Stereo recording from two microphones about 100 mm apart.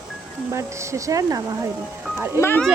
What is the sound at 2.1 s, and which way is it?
Speech, 25° right (ahead or behind).